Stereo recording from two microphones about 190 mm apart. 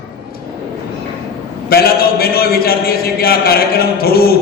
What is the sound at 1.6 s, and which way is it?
A man's voice, 55° left (ahead or behind).